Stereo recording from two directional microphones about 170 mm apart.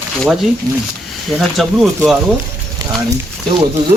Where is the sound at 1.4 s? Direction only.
Centre (ahead or behind).